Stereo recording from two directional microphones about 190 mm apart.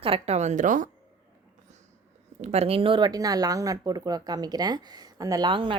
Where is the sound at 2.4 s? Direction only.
35° right (ahead or behind).